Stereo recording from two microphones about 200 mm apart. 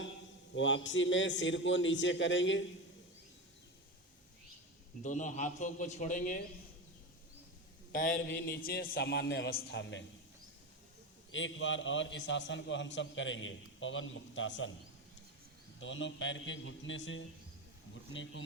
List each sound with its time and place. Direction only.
0.5 s a man's voice: 65° left (ahead or behind)
5.0 s a man's voice: 40° left (ahead or behind)
8.1 s a man's voice: 55° left (ahead or behind)
11.3 s a man's voice: 70° left (ahead or behind)
15.8 s a man's voice: 70° left (ahead or behind)